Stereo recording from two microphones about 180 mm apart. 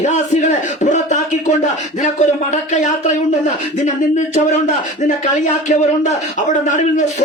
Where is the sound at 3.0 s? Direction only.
40° left (ahead or behind).